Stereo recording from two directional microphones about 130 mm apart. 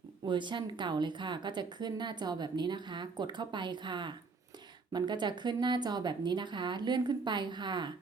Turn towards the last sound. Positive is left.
turn(degrees=-35)  # may be behind; listen again after turning